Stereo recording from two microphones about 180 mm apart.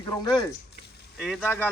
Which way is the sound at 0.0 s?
25° left (ahead or behind).